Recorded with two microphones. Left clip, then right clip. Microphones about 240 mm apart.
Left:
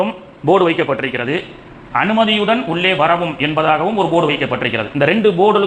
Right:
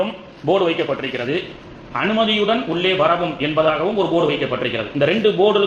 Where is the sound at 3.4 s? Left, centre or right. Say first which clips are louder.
Left 3 dB; left.